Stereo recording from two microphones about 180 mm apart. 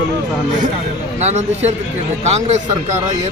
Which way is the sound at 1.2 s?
35° right (ahead or behind).